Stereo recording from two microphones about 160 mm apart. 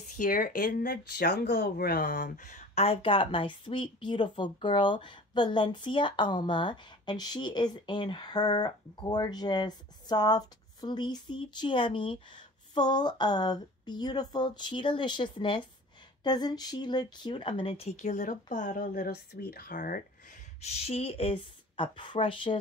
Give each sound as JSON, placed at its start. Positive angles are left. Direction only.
{"t": 0.0, "sound": "speech", "side_deg": 50}